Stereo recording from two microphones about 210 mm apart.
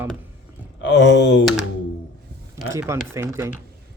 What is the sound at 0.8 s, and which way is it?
Speech, 55° left (ahead or behind).